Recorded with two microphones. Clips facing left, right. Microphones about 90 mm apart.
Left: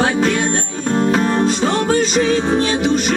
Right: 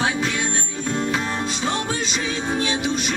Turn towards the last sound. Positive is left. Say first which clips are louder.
# left 7 dB
turn(degrees=50)  # may be behind; listen again after turning